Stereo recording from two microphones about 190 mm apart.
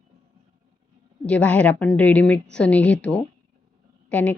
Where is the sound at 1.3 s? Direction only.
5° left (ahead or behind).